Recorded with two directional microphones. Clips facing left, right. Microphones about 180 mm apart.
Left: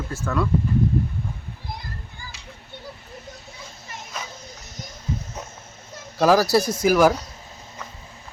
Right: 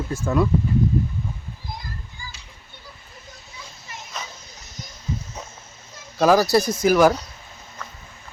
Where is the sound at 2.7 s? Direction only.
65° left (ahead or behind).